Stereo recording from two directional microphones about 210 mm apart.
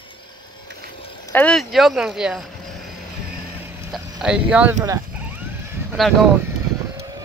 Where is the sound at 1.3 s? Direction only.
5° left (ahead or behind).